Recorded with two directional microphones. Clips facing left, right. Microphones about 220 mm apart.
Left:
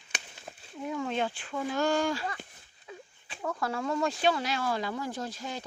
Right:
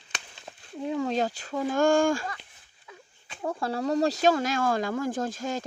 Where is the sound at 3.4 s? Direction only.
30° right (ahead or behind).